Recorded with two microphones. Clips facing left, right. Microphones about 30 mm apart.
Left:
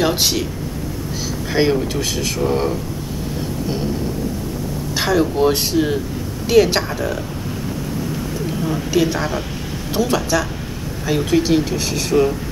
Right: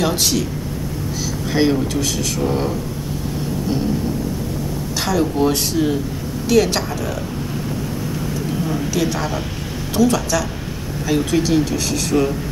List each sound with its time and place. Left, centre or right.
0.0 s speech: centre
1.5 s speech: centre
4.9 s speech: centre
8.9 s speech: centre